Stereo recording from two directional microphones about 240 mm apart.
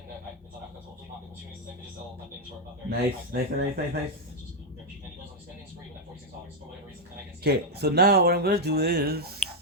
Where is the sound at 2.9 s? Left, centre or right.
Right.